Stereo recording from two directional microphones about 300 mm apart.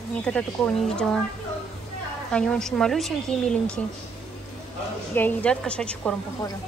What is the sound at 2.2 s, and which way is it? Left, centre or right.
A woman's voice, centre.